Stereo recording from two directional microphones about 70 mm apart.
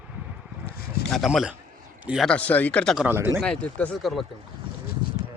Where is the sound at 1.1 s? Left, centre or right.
Centre.